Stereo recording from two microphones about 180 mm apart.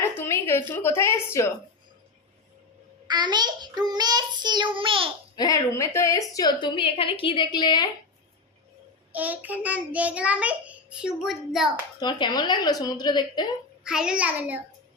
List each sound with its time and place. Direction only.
0.2 s a woman's voice: 15° left (ahead or behind)
3.1 s child singing: 25° right (ahead or behind)
5.4 s a woman's voice: 20° left (ahead or behind)
9.1 s child singing: 10° right (ahead or behind)
11.9 s a woman's voice: 25° left (ahead or behind)
13.8 s child singing: 5° right (ahead or behind)